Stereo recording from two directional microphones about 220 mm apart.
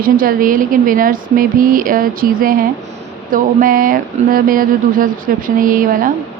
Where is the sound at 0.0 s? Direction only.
40° right (ahead or behind).